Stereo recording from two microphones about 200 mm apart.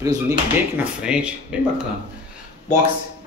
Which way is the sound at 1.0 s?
5° right (ahead or behind).